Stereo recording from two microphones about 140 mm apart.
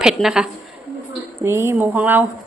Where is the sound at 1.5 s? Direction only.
20° right (ahead or behind).